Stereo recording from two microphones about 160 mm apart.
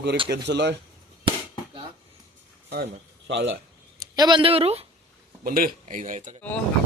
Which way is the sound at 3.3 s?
90° right.